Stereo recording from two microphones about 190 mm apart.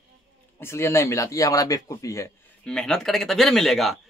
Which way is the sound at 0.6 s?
15° left (ahead or behind).